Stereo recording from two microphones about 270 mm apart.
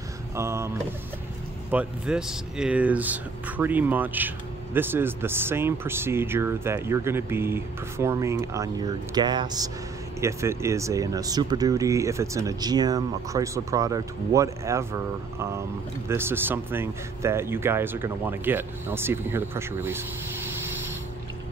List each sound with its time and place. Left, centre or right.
0.4 s speech: centre
1.7 s speech: centre